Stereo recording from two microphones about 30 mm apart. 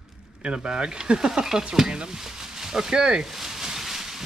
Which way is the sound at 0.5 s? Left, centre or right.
Right.